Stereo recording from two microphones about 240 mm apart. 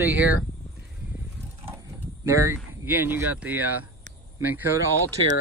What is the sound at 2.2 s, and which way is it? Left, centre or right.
Speech, centre.